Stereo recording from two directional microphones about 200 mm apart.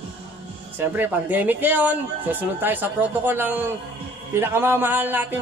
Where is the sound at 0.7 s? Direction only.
10° right (ahead or behind).